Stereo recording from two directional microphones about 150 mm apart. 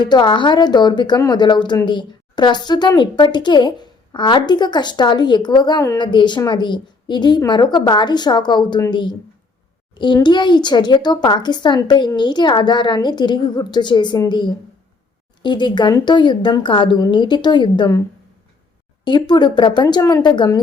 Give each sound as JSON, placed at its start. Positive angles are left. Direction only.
{"t": 0.0, "sound": "a woman's voice", "side_deg": 30}
{"t": 10.2, "sound": "a woman's voice", "side_deg": 30}
{"t": 19.0, "sound": "a woman's voice", "side_deg": 30}